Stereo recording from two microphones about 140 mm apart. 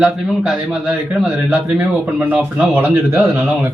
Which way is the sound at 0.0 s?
5° right (ahead or behind).